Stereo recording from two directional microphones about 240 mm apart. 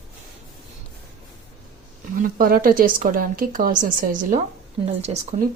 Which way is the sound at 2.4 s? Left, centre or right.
Right.